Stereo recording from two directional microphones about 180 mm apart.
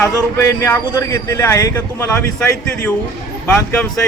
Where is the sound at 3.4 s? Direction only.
10° left (ahead or behind).